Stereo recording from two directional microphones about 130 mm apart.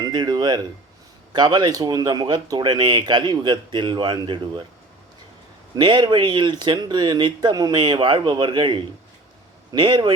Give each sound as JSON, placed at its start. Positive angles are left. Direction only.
{"t": 0.0, "sound": "speech", "side_deg": -30}
{"t": 5.7, "sound": "speech", "side_deg": -35}